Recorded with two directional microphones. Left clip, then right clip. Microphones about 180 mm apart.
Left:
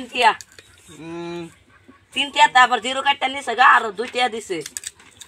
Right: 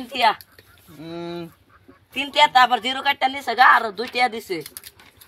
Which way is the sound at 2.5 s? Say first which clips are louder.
Left 1 dB; 15° right (ahead or behind).